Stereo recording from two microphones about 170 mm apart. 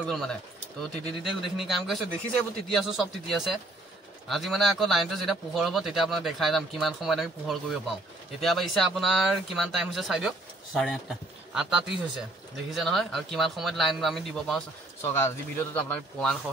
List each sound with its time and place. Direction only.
0.0 s speech: 5° left (ahead or behind)
1.4 s speech: centre (ahead or behind)
15.0 s a man's voice: 15° left (ahead or behind)